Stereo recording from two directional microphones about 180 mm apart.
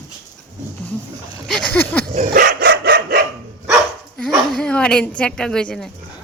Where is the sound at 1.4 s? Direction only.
5° left (ahead or behind).